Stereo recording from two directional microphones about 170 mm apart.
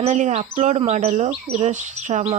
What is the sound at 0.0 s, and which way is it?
Speech, 45° right (ahead or behind).